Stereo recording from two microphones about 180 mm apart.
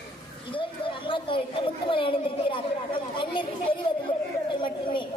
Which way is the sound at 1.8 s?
30° left (ahead or behind).